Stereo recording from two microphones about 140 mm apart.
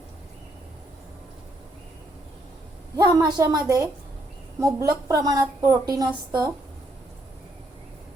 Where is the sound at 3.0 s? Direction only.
25° right (ahead or behind).